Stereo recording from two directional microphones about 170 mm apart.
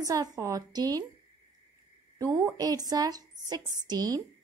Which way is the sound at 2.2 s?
20° right (ahead or behind).